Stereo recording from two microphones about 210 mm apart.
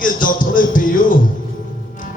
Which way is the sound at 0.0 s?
40° left (ahead or behind).